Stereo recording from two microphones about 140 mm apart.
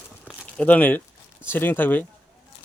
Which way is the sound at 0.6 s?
10° left (ahead or behind).